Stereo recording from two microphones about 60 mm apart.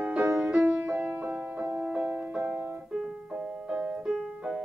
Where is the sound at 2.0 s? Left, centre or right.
Centre.